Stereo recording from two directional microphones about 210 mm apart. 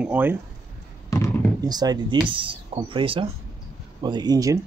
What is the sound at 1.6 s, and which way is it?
Speech, 20° right (ahead or behind).